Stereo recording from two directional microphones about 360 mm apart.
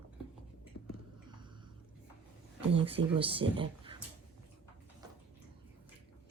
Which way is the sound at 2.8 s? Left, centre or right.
Centre.